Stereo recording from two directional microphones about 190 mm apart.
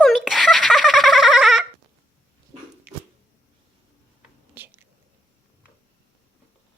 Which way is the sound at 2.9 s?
5° right (ahead or behind).